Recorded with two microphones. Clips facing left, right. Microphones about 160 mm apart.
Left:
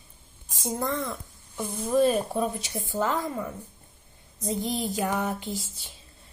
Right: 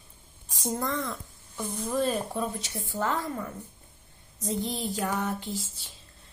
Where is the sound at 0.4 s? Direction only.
Centre (ahead or behind).